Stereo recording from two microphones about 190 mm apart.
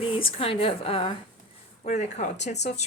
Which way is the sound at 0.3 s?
30° left (ahead or behind).